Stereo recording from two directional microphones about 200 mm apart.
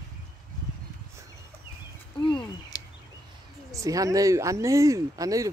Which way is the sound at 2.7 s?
15° left (ahead or behind).